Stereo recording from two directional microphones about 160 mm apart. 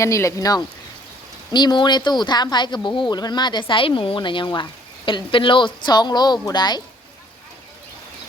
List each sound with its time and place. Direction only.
0.0 s speech: 20° left (ahead or behind)